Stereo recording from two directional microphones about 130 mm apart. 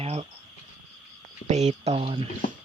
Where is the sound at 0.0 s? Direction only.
50° right (ahead or behind).